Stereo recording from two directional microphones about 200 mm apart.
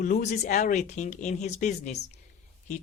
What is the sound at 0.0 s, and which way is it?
Speech, 40° left (ahead or behind).